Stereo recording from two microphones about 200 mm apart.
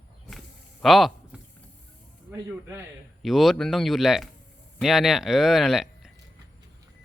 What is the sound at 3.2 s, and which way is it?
Speech, centre (ahead or behind).